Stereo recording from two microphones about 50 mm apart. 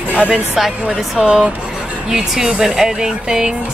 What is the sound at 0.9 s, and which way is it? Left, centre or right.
Speech, centre.